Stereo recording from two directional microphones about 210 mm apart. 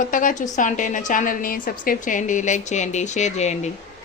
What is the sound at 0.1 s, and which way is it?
A woman's voice, 40° left (ahead or behind).